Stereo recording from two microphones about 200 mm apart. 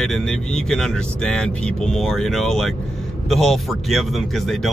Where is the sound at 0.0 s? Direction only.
5° left (ahead or behind).